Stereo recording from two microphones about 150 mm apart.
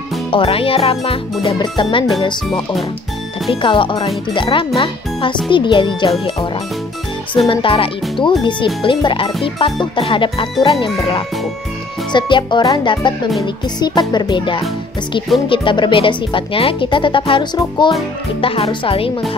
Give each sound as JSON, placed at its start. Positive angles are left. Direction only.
{"t": 0.3, "sound": "speech", "side_deg": 35}
{"t": 3.6, "sound": "speech", "side_deg": 35}
{"t": 13.4, "sound": "music", "side_deg": 30}
{"t": 15.4, "sound": "speech", "side_deg": 35}